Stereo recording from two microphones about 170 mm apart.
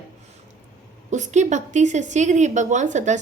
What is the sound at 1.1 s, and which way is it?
A woman's voice, 45° right (ahead or behind).